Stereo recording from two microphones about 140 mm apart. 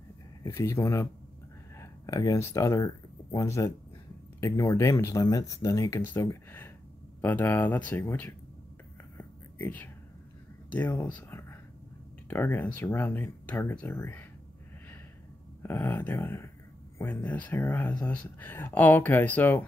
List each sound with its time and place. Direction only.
0.5 s speech: 15° left (ahead or behind)
9.2 s whispering: 15° left (ahead or behind)
10.7 s speech: 15° left (ahead or behind)
15.6 s speech: 15° left (ahead or behind)